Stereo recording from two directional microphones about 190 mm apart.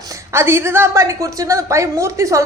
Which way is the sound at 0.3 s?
15° right (ahead or behind).